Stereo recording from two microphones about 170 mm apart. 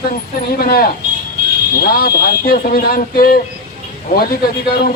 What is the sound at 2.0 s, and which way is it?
Speech, 60° left (ahead or behind).